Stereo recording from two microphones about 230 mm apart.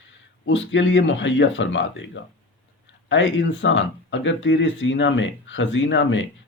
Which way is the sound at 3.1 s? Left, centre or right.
Left.